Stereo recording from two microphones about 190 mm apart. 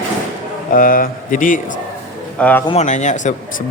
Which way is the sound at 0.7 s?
45° left (ahead or behind).